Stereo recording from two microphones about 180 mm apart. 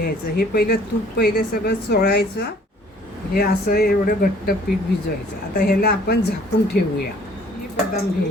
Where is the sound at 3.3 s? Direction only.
55° left (ahead or behind).